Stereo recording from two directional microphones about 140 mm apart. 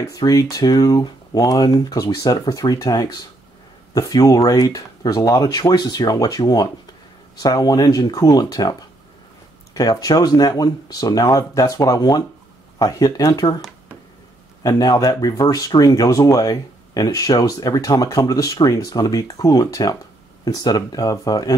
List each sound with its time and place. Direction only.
0.1 s speech: 25° left (ahead or behind)
9.8 s speech: 25° left (ahead or behind)
14.6 s speech: 25° left (ahead or behind)